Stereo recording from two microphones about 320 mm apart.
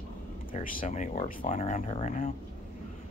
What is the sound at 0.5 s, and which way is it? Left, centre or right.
Speech, left.